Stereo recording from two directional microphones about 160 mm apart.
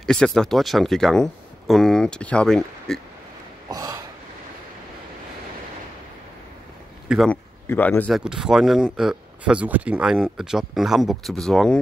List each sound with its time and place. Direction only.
0.0 s speech: 5° left (ahead or behind)
3.6 s a sound: 20° right (ahead or behind)
7.2 s speech: 10° left (ahead or behind)
8.2 s speech: 5° right (ahead or behind)